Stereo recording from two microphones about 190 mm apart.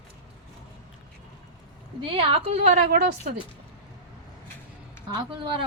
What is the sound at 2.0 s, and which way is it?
Speech, 30° right (ahead or behind).